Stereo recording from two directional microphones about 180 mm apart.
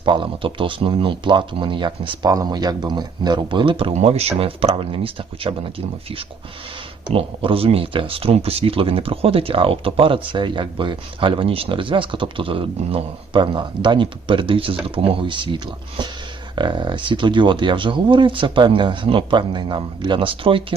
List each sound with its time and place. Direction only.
0.0 s speech: 30° right (ahead or behind)
7.1 s speech: 30° right (ahead or behind)